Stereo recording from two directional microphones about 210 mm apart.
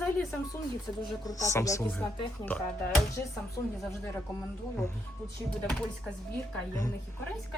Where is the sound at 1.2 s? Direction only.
15° left (ahead or behind).